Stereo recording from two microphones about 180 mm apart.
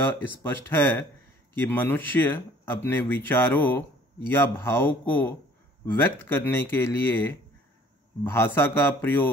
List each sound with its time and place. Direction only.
0.0 s speech: 10° left (ahead or behind)